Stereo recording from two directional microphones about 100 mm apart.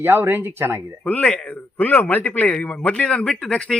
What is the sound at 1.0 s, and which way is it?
A man's voice, 15° left (ahead or behind).